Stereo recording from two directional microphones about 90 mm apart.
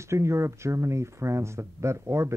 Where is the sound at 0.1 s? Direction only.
35° right (ahead or behind).